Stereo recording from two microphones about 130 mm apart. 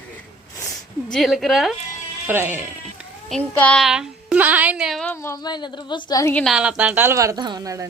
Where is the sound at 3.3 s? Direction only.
5° left (ahead or behind).